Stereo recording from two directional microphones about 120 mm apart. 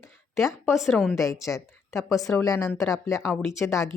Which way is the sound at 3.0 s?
25° left (ahead or behind).